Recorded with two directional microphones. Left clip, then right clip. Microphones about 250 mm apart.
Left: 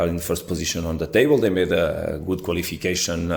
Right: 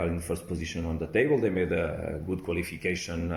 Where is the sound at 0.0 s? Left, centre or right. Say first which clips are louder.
Left 8 dB; left.